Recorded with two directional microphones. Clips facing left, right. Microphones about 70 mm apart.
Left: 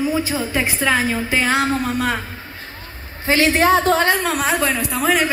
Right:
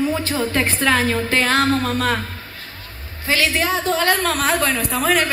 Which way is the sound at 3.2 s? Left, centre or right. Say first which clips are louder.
Left 5 dB; left.